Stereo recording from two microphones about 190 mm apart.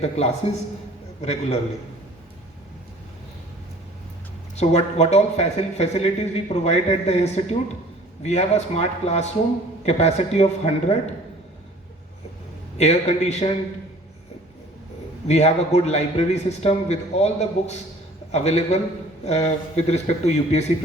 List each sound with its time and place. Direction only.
0.0 s a man's voice: 35° left (ahead or behind)
4.5 s a man's voice: 35° left (ahead or behind)
12.7 s a man's voice: 35° left (ahead or behind)
15.3 s a man's voice: 35° left (ahead or behind)